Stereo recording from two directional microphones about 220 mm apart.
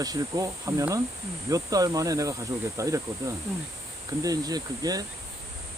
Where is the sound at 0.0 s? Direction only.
15° right (ahead or behind).